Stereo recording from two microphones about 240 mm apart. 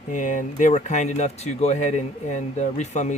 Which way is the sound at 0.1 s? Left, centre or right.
Left.